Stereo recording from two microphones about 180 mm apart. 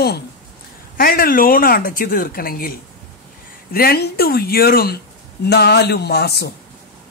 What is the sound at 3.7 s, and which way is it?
A woman's voice, 60° left (ahead or behind).